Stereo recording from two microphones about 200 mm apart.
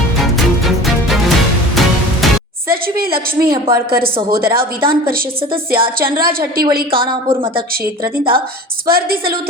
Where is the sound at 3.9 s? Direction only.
50° right (ahead or behind).